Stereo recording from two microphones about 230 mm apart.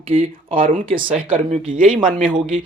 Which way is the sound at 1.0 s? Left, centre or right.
Right.